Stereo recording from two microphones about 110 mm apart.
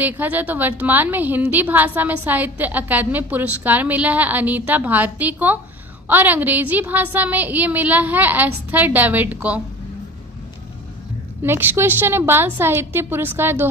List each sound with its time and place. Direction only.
0.0 s a woman's voice: 15° right (ahead or behind)
11.4 s a woman's voice: 20° right (ahead or behind)